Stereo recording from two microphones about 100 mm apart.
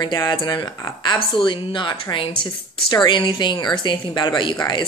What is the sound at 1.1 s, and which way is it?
A woman's voice, 55° left (ahead or behind).